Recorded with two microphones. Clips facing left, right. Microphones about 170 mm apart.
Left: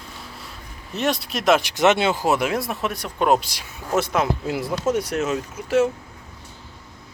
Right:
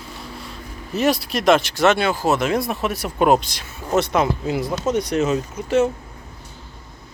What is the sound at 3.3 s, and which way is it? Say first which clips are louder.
Speech: right 3 dB; 10° left (ahead or behind).